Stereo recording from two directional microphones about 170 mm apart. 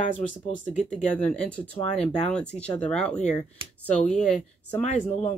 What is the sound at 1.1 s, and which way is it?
Speech, 5° left (ahead or behind).